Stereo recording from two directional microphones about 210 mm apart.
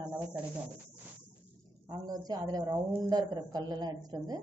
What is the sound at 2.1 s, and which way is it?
A woman's voice, 20° right (ahead or behind).